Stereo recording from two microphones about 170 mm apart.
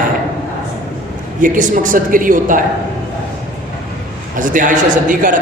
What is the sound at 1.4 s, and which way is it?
A man's voice, 50° right (ahead or behind).